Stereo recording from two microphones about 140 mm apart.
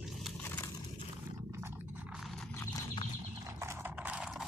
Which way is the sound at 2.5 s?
20° left (ahead or behind).